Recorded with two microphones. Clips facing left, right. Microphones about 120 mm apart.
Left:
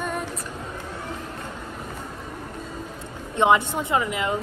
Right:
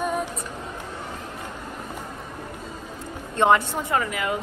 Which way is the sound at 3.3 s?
15° left (ahead or behind).